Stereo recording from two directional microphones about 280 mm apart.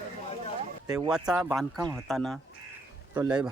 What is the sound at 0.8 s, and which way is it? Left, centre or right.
Speech, centre.